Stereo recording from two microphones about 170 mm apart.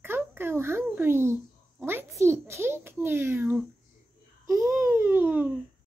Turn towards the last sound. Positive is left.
turn(degrees=-10)  # may be behind; listen again after turning